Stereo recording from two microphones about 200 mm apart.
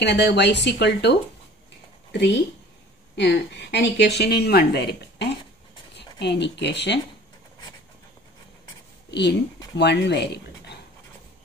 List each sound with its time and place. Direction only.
0.0 s speech: 55° left (ahead or behind)
2.1 s speech: 60° left (ahead or behind)
9.8 s speech: 60° left (ahead or behind)